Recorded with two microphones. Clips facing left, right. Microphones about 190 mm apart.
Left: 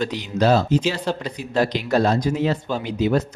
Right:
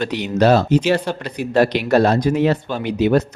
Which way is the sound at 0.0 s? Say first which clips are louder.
Right 4 dB; 65° right (ahead or behind).